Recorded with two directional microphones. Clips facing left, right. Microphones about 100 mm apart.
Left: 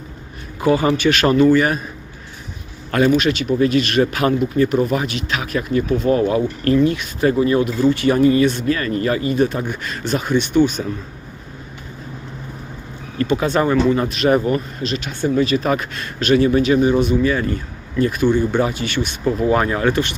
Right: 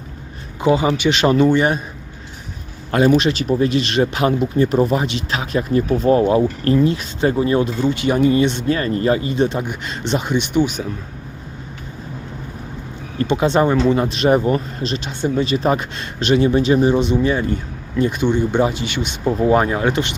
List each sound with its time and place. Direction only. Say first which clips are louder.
0.6 s speech: even; 20° right (ahead or behind)
3.2 s speech: even; 30° right (ahead or behind); by 10.8 s 15° right (ahead or behind)
13.1 s speech: right 1 dB; 25° right (ahead or behind)